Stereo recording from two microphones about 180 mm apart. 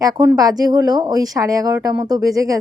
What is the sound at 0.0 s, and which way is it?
A woman's voice, 20° right (ahead or behind).